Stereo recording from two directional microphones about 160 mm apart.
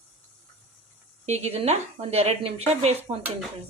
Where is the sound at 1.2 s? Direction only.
45° right (ahead or behind).